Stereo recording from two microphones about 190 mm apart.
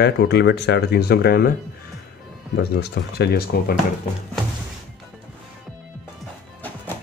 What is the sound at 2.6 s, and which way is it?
Speech, 60° left (ahead or behind).